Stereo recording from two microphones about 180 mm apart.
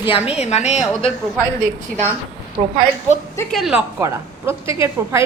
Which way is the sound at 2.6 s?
40° right (ahead or behind).